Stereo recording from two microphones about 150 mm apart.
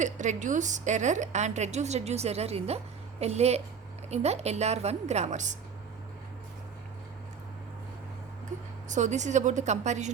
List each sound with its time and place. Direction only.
0.0 s a woman's voice: 55° right (ahead or behind)
8.9 s a woman's voice: 50° right (ahead or behind)